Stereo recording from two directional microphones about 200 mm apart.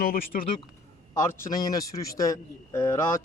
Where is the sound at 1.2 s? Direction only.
15° left (ahead or behind).